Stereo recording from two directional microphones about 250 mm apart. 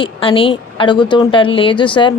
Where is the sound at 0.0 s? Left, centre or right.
Left.